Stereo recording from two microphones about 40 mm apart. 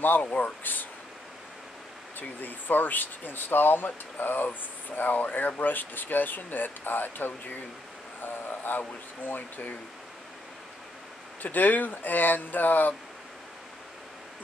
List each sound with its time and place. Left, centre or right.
0.0 s speech: left
2.1 s speech: left
11.4 s speech: left